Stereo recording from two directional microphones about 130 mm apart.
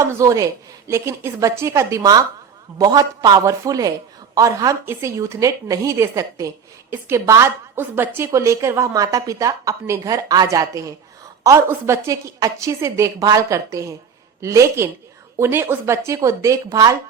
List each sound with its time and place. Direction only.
0.0 s a woman's voice: 25° right (ahead or behind)